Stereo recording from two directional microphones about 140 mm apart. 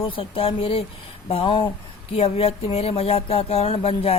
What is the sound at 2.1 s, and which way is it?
Speech, 45° left (ahead or behind).